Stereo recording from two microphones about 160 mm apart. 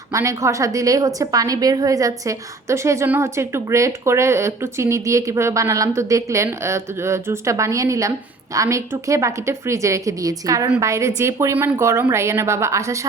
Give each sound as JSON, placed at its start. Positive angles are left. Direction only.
{"t": 0.1, "sound": "a woman's voice", "side_deg": -20}